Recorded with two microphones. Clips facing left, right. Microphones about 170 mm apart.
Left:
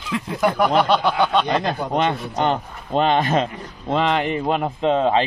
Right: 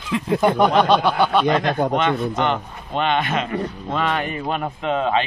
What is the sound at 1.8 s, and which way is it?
Speech, 50° right (ahead or behind).